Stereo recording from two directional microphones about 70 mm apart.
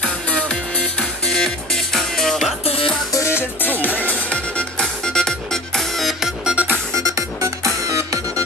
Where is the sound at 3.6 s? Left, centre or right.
Left; by 6.3 s centre.